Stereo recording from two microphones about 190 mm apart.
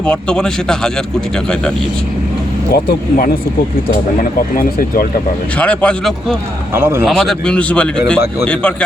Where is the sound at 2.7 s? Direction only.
50° left (ahead or behind).